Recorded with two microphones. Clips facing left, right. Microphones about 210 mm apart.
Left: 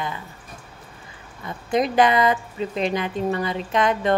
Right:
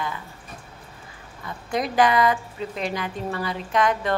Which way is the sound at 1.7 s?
20° left (ahead or behind).